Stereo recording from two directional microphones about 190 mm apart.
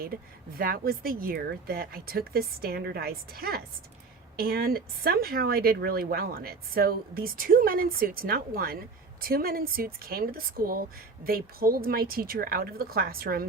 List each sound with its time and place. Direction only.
0.0 s speech: 50° right (ahead or behind)